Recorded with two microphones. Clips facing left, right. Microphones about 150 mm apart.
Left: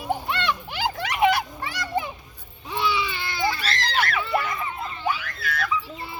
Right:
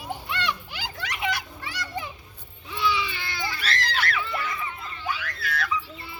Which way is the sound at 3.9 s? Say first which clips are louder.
Left 5 dB; 50° left (ahead or behind).